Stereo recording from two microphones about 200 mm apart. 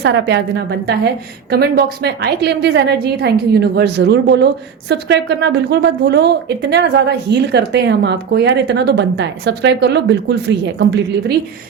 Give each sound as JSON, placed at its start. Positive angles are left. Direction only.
{"t": 0.0, "sound": "a woman's voice", "side_deg": -60}